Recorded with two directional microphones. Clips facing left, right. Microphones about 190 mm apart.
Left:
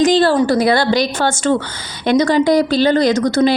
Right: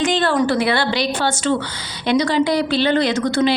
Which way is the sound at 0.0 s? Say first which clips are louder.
Left 5 dB; 35° left (ahead or behind).